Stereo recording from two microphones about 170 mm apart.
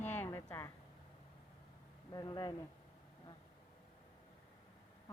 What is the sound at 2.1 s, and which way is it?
Speech, 25° left (ahead or behind).